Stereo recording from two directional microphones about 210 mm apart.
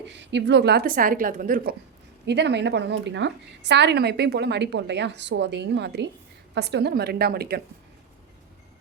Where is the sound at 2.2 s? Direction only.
55° right (ahead or behind).